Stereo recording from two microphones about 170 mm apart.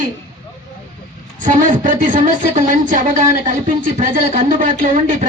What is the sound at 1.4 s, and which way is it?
Speech, 50° right (ahead or behind).